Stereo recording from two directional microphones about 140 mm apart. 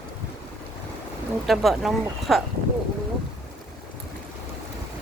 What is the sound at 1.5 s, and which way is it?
Speech, centre (ahead or behind).